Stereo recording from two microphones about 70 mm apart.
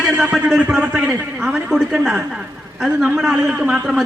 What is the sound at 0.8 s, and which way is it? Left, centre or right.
A woman's voice, centre.